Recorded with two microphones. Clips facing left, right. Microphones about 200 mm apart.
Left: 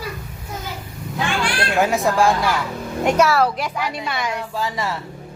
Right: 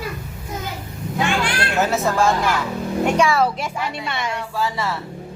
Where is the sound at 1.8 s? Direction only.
15° left (ahead or behind).